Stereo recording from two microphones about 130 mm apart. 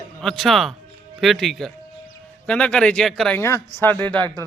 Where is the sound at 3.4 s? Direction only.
20° left (ahead or behind).